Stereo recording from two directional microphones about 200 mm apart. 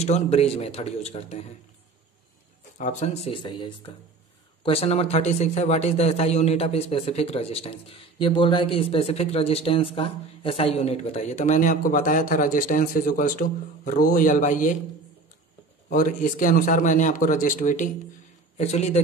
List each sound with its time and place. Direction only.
0.0 s a man's voice: 30° left (ahead or behind)
2.8 s a man's voice: 35° left (ahead or behind)
15.9 s a man's voice: 40° left (ahead or behind)